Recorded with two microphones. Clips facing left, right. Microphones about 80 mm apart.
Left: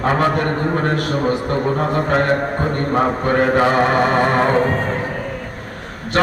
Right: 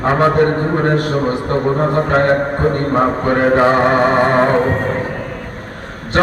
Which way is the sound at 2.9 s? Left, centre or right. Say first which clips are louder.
Left 1 dB; right.